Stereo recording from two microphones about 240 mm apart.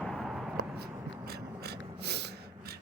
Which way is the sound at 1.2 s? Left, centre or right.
Right.